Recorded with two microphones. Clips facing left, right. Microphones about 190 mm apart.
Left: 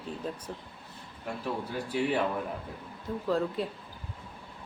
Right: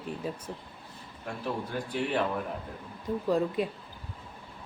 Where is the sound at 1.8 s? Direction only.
10° left (ahead or behind).